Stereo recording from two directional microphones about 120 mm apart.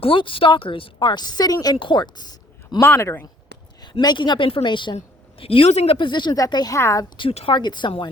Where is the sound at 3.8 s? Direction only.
35° left (ahead or behind).